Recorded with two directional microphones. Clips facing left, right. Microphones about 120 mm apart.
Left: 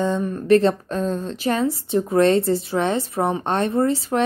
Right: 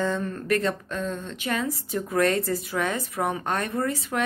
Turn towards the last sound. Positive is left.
turn(degrees=30)  # may be behind; listen again after turning